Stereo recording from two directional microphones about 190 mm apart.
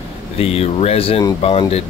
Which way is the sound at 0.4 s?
30° left (ahead or behind).